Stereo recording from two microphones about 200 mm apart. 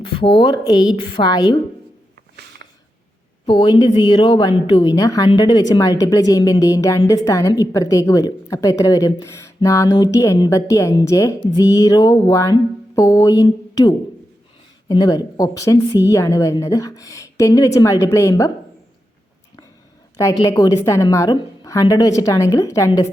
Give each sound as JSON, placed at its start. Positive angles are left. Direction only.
{"t": 0.0, "sound": "a woman's voice", "side_deg": 25}
{"t": 3.4, "sound": "a woman's voice", "side_deg": 25}
{"t": 20.4, "sound": "a woman's voice", "side_deg": 15}